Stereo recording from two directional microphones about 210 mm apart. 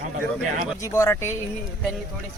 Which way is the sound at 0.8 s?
15° left (ahead or behind).